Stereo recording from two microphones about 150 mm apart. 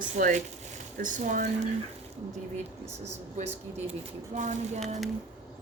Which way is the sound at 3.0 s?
50° right (ahead or behind).